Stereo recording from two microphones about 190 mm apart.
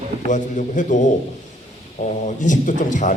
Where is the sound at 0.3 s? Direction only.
40° left (ahead or behind).